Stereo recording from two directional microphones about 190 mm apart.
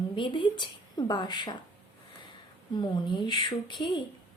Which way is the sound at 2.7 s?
25° left (ahead or behind).